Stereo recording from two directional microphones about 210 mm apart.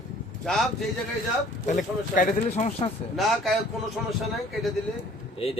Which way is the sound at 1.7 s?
40° left (ahead or behind).